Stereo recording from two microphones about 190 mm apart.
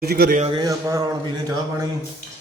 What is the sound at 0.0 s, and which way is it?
Speech, 55° right (ahead or behind).